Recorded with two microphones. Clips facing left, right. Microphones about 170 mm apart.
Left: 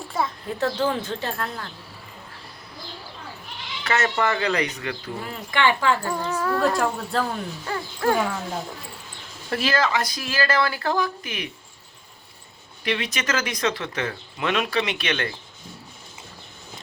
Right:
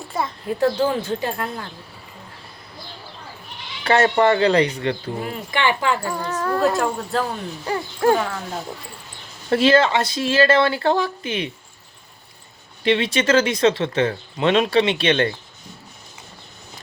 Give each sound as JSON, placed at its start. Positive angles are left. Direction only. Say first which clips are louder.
{"t": 0.1, "sound": "a child's voice", "louder": "right 2 dB", "side_deg": -5}
{"t": 3.8, "sound": "speech", "louder": "right 7 dB", "side_deg": -30}
{"t": 5.5, "sound": "a child's voice", "louder": "even", "side_deg": -15}
{"t": 6.1, "sound": "speech", "louder": "right 2 dB", "side_deg": 5}
{"t": 7.6, "sound": "speech", "louder": "right 6 dB", "side_deg": -20}
{"t": 9.5, "sound": "speech", "louder": "right 7 dB", "side_deg": -25}
{"t": 12.8, "sound": "speech", "louder": "right 8 dB", "side_deg": -25}